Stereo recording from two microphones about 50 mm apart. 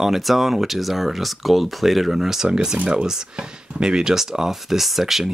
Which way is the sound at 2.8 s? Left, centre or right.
Right.